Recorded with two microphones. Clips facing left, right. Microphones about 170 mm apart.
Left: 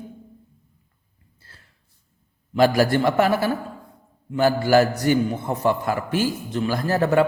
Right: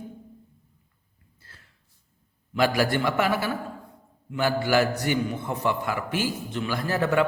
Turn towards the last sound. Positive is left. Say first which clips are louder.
# left 4 dB
turn(degrees=40)  # may be behind; listen again after turning